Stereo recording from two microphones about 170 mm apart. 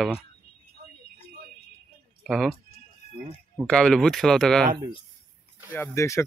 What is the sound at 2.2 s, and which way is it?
Speech, centre (ahead or behind).